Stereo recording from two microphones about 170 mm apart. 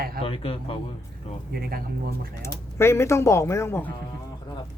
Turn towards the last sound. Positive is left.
turn(degrees=15)  # may be behind; listen again after turning